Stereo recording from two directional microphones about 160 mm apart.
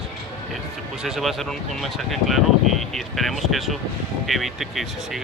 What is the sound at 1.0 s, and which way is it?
Speech, centre (ahead or behind).